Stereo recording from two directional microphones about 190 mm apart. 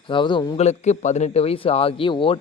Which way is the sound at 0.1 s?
25° left (ahead or behind).